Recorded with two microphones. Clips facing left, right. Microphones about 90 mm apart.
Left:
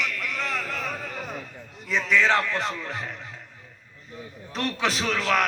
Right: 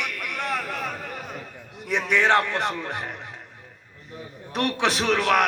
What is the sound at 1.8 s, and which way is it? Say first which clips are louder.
A man's voice: right 1 dB; 65° right (ahead or behind).